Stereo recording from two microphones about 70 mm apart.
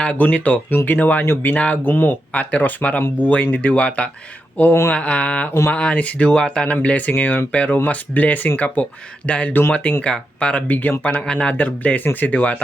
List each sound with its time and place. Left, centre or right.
0.0 s speech: left
10.7 s speech: left